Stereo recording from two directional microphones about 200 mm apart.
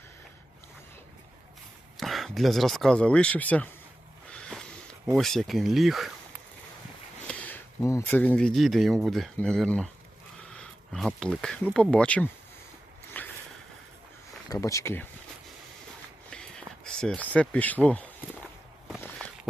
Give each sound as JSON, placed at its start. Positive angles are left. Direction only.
{"t": 2.0, "sound": "speech", "side_deg": 0}
{"t": 4.3, "sound": "a sound", "side_deg": 5}
{"t": 5.1, "sound": "speech", "side_deg": 0}
{"t": 7.3, "sound": "speech", "side_deg": 10}
{"t": 13.2, "sound": "boat", "side_deg": 10}
{"t": 14.5, "sound": "speech", "side_deg": 15}
{"t": 16.3, "sound": "a sound", "side_deg": 5}